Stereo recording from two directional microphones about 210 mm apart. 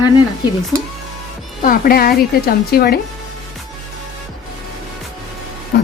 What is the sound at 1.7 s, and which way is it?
Speech, 45° left (ahead or behind).